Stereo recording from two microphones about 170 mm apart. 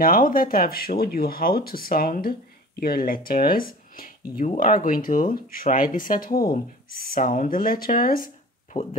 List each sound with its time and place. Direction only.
0.0 s speech: 55° left (ahead or behind)